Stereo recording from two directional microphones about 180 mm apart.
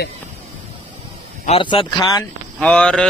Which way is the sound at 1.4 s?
30° left (ahead or behind).